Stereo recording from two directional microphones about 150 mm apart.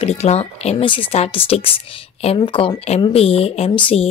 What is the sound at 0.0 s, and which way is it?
Speech, 45° left (ahead or behind).